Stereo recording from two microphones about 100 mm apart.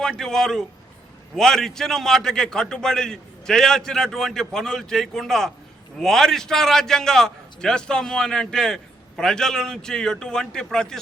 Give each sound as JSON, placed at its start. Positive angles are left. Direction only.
{"t": 0.0, "sound": "a man's voice", "side_deg": 5}